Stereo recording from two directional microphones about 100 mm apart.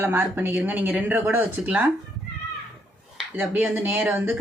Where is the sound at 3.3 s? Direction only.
15° right (ahead or behind).